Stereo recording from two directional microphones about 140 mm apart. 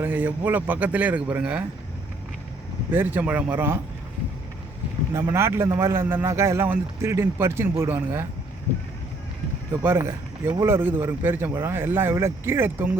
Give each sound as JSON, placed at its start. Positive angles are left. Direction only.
{"t": 0.0, "sound": "speech", "side_deg": -10}
{"t": 2.9, "sound": "speech", "side_deg": -15}
{"t": 5.3, "sound": "a man's voice", "side_deg": -20}
{"t": 9.8, "sound": "speech", "side_deg": -15}